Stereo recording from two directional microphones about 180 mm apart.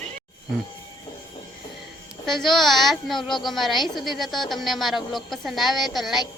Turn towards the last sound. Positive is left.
turn(degrees=0)  # may be behind; listen again after turning